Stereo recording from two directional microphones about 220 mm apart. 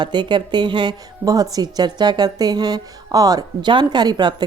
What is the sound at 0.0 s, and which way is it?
A woman's voice, 20° right (ahead or behind).